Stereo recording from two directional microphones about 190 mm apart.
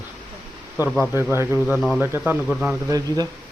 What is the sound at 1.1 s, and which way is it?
Speech, 10° right (ahead or behind).